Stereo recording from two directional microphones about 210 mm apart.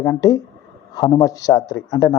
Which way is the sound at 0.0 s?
10° left (ahead or behind).